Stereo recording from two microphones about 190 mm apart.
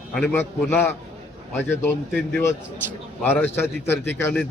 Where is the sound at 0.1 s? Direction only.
10° left (ahead or behind).